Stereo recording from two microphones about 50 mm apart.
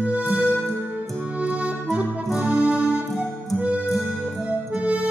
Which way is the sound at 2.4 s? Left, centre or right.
Right.